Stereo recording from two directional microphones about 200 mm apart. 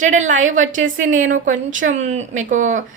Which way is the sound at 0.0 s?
40° right (ahead or behind).